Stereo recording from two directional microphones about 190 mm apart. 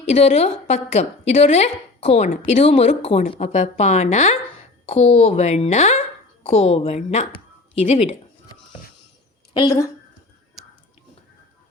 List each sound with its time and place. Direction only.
0.0 s a woman's voice: 35° left (ahead or behind)
9.6 s a woman's voice: 20° left (ahead or behind)